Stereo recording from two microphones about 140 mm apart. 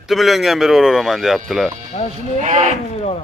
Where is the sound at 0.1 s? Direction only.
Centre (ahead or behind).